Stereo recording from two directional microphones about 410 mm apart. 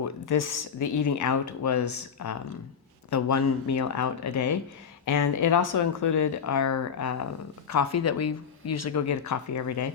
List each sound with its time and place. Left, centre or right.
0.0 s speech: left